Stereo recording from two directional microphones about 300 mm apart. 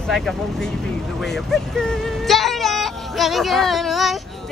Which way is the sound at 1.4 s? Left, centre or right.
Centre.